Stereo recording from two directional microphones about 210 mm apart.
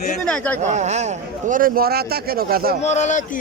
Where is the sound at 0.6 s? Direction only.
35° right (ahead or behind).